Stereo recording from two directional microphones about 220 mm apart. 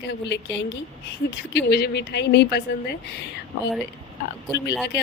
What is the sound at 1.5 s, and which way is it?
Speech, 45° left (ahead or behind).